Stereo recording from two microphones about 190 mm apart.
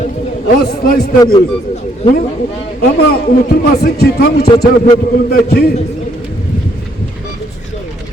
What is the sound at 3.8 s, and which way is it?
A man's voice, 55° left (ahead or behind).